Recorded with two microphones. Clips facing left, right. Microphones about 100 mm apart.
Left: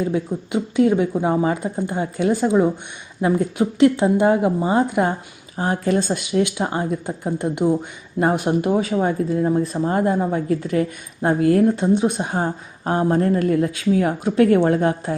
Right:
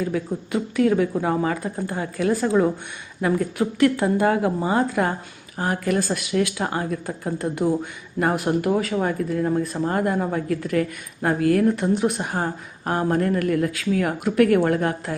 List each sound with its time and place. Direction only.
0.0 s speech: 25° left (ahead or behind)